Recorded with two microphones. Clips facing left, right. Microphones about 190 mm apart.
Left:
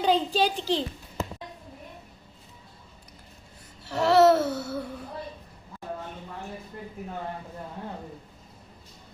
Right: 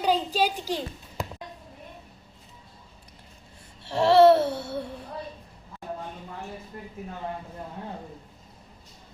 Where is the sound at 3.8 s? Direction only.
25° right (ahead or behind).